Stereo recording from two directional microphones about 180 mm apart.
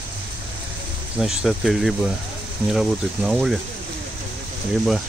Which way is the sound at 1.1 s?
Centre (ahead or behind).